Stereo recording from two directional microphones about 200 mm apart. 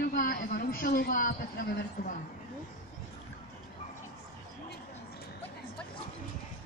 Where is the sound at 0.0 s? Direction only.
45° left (ahead or behind).